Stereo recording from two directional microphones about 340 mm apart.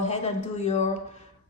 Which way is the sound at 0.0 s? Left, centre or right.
Centre.